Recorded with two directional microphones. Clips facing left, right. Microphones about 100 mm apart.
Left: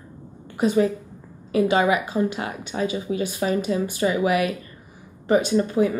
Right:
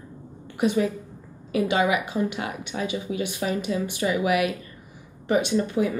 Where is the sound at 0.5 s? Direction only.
35° left (ahead or behind).